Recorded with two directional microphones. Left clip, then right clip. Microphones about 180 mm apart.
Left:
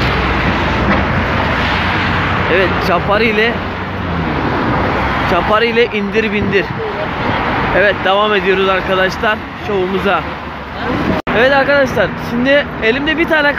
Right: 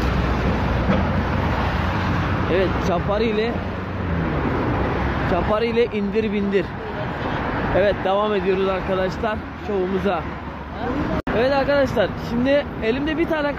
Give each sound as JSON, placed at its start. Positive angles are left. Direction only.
{"t": 2.5, "sound": "speech", "side_deg": -5}
{"t": 5.3, "sound": "speech", "side_deg": -5}
{"t": 7.8, "sound": "speech", "side_deg": -10}
{"t": 11.3, "sound": "speech", "side_deg": -5}